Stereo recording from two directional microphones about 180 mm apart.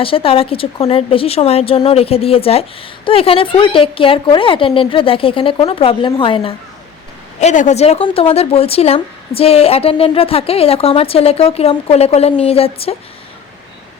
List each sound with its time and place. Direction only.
0.0 s a woman's voice: 30° left (ahead or behind)
7.3 s a woman's voice: 40° left (ahead or behind)